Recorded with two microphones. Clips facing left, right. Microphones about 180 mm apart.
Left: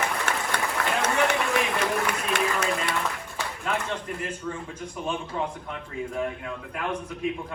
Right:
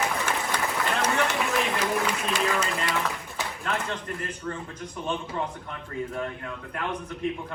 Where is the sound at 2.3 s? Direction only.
60° left (ahead or behind).